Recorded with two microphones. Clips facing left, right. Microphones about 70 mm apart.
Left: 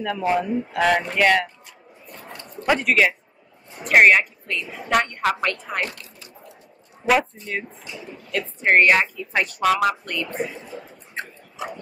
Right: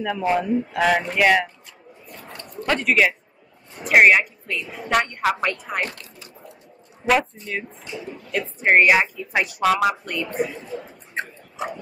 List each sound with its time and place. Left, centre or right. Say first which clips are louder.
0.3 s a woman's voice: right 1 dB; centre
2.3 s a sound: left 2 dB; centre
2.9 s a woman's voice: even; centre
7.1 s a woman's voice: even; centre
8.3 s speech: right 1 dB; centre
11.1 s a sound: right 3 dB; right